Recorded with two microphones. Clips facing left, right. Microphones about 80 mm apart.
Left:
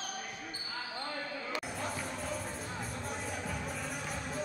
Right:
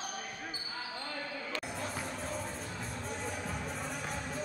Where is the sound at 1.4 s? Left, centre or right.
Centre.